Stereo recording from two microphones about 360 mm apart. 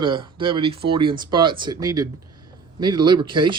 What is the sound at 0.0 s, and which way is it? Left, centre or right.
Speech, centre.